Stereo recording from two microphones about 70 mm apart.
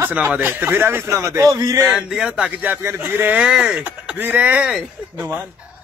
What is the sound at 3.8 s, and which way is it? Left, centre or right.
A man's voice, right.